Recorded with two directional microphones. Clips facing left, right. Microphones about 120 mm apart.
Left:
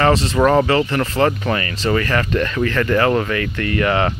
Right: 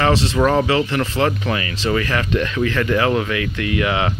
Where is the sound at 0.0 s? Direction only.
Centre (ahead or behind).